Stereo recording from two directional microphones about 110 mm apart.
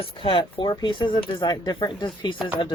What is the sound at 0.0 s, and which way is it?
Speech, 50° left (ahead or behind).